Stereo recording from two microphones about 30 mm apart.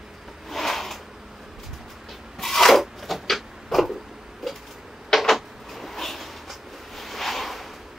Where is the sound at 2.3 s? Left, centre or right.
Centre.